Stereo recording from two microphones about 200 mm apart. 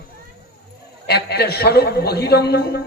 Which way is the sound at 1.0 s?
55° left (ahead or behind).